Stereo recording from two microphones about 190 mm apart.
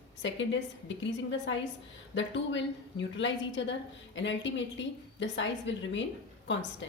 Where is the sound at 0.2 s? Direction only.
75° left (ahead or behind).